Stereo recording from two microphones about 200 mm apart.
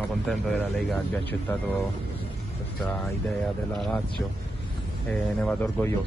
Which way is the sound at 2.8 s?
5° left (ahead or behind).